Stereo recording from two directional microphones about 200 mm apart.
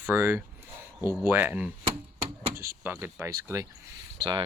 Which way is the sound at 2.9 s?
10° right (ahead or behind).